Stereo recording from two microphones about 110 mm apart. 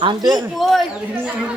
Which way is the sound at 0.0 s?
40° right (ahead or behind).